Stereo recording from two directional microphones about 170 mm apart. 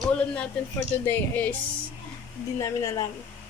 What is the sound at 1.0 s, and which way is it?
Speech, 10° left (ahead or behind).